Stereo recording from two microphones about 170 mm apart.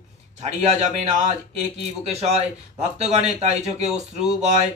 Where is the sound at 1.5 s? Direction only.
40° right (ahead or behind).